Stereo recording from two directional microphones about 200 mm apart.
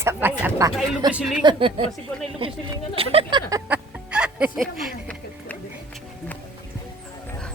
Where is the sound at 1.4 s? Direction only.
25° right (ahead or behind).